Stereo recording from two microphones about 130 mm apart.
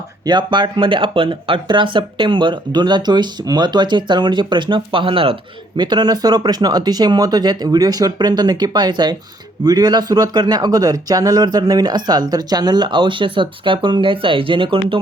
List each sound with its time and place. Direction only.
0.3 s speech: 35° right (ahead or behind)